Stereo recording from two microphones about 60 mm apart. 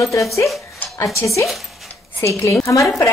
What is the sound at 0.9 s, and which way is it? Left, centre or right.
A woman's voice, left.